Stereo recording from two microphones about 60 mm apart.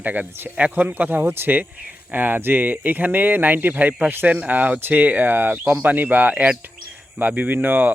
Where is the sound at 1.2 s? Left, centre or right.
Right.